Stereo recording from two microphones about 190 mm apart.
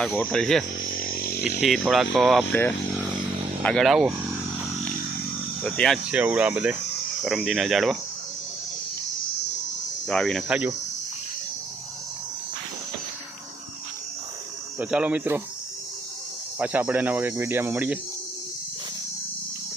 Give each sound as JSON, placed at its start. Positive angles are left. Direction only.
{"t": 0.0, "sound": "speech", "side_deg": 5}
{"t": 1.0, "sound": "a sound", "side_deg": 50}
{"t": 1.6, "sound": "speech", "side_deg": 0}
{"t": 3.6, "sound": "speech", "side_deg": 5}
{"t": 5.6, "sound": "speech", "side_deg": 5}
{"t": 10.1, "sound": "speech", "side_deg": 5}
{"t": 14.8, "sound": "speech", "side_deg": -5}
{"t": 16.6, "sound": "speech", "side_deg": -10}